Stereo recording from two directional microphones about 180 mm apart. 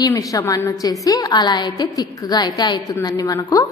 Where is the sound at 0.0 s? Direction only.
20° left (ahead or behind).